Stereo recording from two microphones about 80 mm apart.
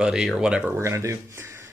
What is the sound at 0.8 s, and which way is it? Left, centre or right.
Speech, right.